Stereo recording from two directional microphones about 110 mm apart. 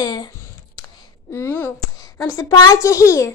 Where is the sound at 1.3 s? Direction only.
20° left (ahead or behind).